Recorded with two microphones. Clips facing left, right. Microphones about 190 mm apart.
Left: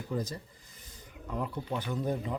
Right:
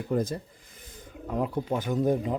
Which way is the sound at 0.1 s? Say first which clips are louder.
Right 7 dB; 50° right (ahead or behind).